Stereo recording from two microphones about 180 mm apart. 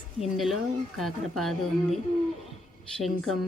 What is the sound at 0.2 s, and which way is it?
A woman's voice, centre (ahead or behind).